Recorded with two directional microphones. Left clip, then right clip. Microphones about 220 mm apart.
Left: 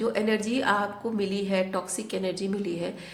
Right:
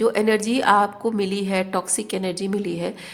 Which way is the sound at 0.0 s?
35° right (ahead or behind).